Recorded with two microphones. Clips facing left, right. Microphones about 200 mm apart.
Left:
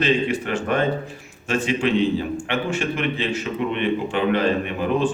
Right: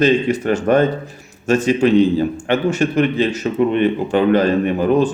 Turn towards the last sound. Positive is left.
turn(degrees=-40)  # may be behind; listen again after turning